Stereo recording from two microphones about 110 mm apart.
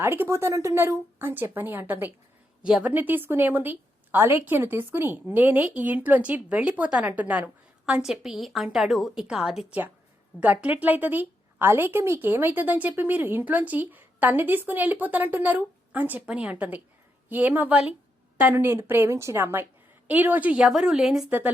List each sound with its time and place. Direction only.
0.0 s a woman's voice: 20° right (ahead or behind)
2.6 s a woman's voice: 5° right (ahead or behind)
2.9 s a woman's voice: 15° right (ahead or behind)
21.2 s speech: 15° right (ahead or behind)